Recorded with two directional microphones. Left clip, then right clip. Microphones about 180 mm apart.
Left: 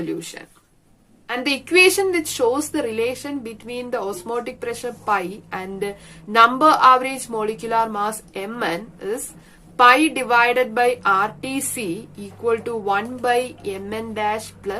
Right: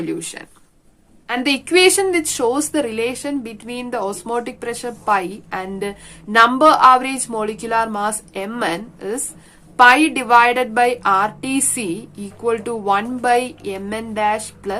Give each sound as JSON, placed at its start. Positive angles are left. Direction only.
{"t": 0.0, "sound": "a woman's voice", "side_deg": -35}